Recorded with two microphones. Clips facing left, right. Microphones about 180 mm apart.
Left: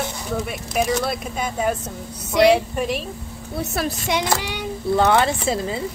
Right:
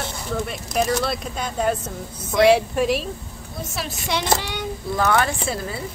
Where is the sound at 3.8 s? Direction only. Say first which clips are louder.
Left 6 dB; 50° left (ahead or behind).